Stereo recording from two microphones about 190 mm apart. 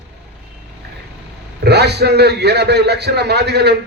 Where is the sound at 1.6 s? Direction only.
60° right (ahead or behind).